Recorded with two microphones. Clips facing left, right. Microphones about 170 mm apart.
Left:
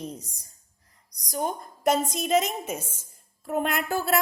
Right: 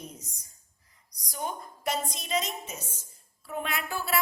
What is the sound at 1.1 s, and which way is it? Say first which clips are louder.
A woman's voice: left 6 dB; 40° left (ahead or behind).